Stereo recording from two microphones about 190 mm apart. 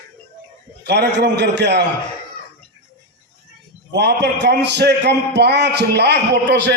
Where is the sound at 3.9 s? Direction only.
60° right (ahead or behind).